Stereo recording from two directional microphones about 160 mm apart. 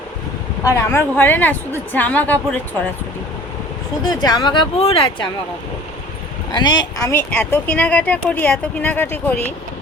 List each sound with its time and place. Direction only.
0.6 s speech: 15° left (ahead or behind)
4.1 s speech: 25° left (ahead or behind)
6.5 s speech: 25° left (ahead or behind); by 9.5 s 10° left (ahead or behind)